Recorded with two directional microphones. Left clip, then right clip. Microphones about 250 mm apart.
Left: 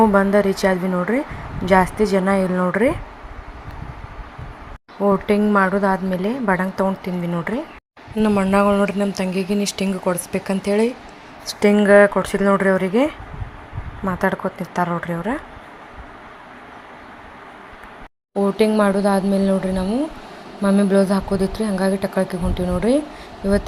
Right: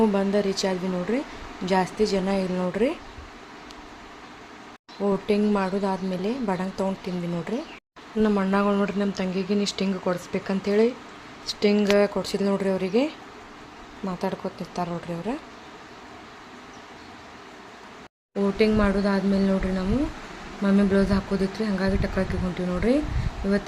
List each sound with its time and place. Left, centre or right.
0.0 s speech: centre
5.0 s speech: centre
8.2 s speech: centre
14.2 s speech: centre
18.5 s speech: centre